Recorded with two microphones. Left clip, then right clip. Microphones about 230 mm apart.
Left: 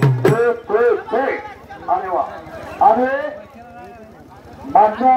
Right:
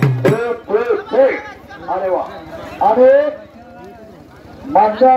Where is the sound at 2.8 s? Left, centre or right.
Left.